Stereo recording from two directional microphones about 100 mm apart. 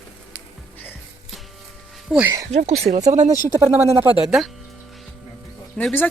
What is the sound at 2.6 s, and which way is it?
Speech, 90° right.